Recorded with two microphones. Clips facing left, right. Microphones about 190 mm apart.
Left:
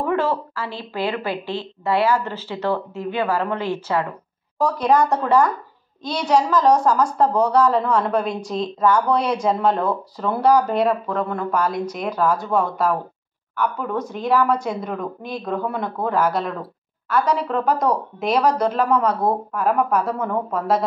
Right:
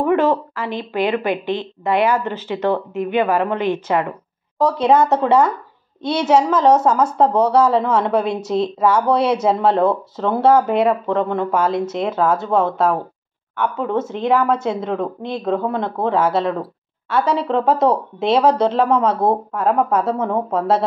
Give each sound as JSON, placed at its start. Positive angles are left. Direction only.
{"t": 0.0, "sound": "speech", "side_deg": -15}
{"t": 10.8, "sound": "speech", "side_deg": 0}
{"t": 11.3, "sound": "speech", "side_deg": -25}